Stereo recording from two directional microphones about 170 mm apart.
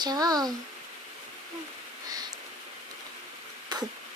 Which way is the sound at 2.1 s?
25° right (ahead or behind).